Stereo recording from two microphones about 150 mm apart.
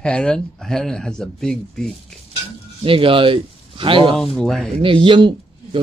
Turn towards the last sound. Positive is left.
turn(degrees=-35)  # may be behind; listen again after turning